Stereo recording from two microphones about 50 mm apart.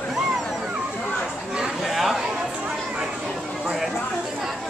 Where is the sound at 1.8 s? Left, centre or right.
Centre.